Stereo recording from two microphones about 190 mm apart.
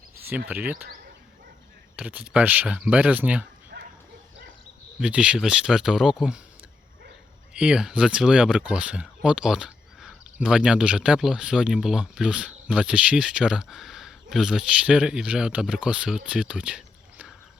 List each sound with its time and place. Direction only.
0.3 s speech: 10° right (ahead or behind)
2.0 s speech: 5° right (ahead or behind)
3.7 s bow-wow: 55° right (ahead or behind)
4.9 s speech: 5° right (ahead or behind)
7.5 s speech: 5° right (ahead or behind)